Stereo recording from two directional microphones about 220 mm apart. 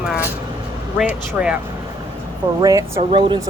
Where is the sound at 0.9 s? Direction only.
5° right (ahead or behind).